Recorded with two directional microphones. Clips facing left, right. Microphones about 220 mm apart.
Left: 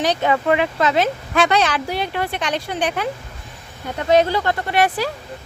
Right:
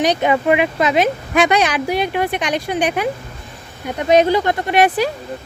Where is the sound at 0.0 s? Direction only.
15° right (ahead or behind).